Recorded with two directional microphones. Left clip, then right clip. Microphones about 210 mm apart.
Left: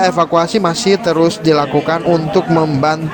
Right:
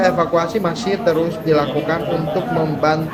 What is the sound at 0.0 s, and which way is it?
Speech, 50° left (ahead or behind).